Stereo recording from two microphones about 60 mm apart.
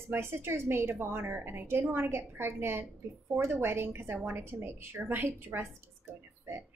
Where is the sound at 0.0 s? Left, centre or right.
Right.